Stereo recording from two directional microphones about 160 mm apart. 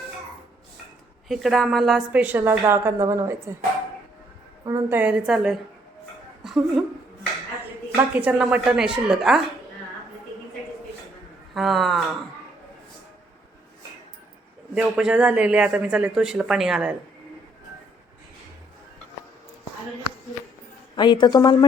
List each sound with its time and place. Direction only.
1.3 s a woman's voice: centre (ahead or behind); by 3.3 s 15° right (ahead or behind)
4.6 s a woman's voice: 15° right (ahead or behind)
6.4 s a sound: centre (ahead or behind)
7.9 s speech: 10° right (ahead or behind)
11.5 s speech: centre (ahead or behind)
14.8 s speech: 5° right (ahead or behind)
20.9 s a woman's voice: 30° left (ahead or behind)